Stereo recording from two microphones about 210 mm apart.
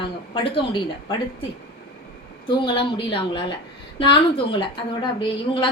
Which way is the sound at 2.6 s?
25° left (ahead or behind).